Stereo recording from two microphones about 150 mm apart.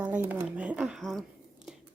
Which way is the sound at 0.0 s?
10° right (ahead or behind).